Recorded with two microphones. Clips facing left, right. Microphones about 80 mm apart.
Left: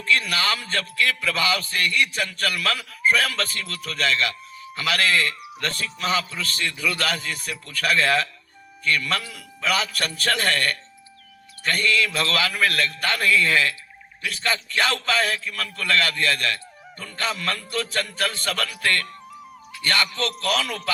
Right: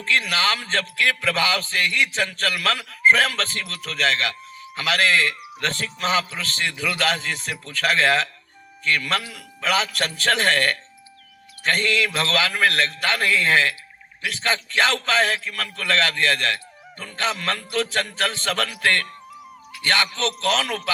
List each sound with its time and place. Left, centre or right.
0.0 s a man's voice: right
11.9 s a man's voice: right
19.8 s a man's voice: right